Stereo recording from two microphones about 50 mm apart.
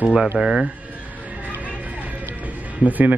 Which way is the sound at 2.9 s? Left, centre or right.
Right.